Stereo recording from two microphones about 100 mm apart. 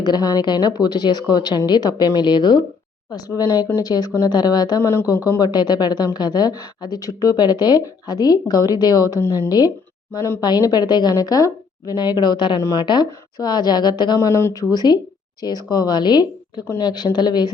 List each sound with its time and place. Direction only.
0.0 s a woman's voice: 45° left (ahead or behind)
4.8 s speech: 30° left (ahead or behind)
5.4 s a woman's voice: 45° left (ahead or behind)
9.1 s speech: 30° left (ahead or behind)
9.5 s speech: 40° left (ahead or behind)
10.1 s a woman's voice: 30° left (ahead or behind)
10.4 s a woman's voice: 40° left (ahead or behind)
14.2 s a woman's voice: 30° left (ahead or behind)